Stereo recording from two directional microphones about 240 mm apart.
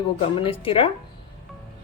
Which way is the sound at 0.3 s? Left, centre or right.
Left.